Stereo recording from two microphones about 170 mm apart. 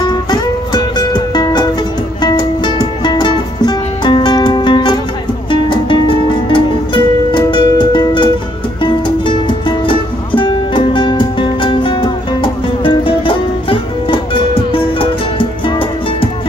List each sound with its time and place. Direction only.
0.0 s music: 25° left (ahead or behind)